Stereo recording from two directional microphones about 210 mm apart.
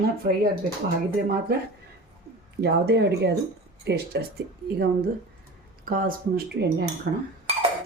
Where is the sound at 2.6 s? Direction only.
50° right (ahead or behind).